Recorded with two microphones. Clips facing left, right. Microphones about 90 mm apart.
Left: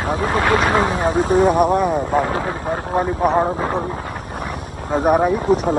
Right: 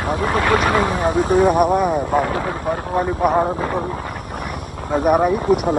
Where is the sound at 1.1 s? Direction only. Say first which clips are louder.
Even; 55° right (ahead or behind).